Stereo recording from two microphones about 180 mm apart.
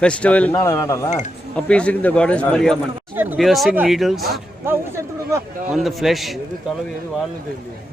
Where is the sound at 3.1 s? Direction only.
10° right (ahead or behind).